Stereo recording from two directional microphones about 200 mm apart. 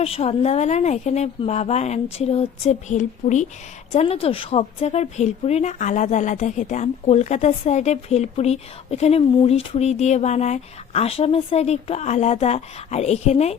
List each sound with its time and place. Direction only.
0.0 s speech: 30° left (ahead or behind)